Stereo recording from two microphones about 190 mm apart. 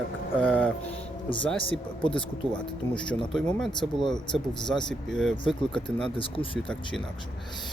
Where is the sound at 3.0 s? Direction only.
5° left (ahead or behind).